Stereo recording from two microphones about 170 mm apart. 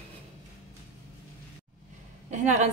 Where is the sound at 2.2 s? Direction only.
45° right (ahead or behind).